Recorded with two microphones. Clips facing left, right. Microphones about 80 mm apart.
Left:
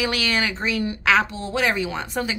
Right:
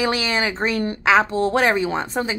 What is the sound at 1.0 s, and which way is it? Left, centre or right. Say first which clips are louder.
Speech: right 3 dB; right.